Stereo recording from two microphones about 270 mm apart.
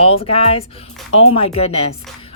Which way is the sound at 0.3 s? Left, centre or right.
Left.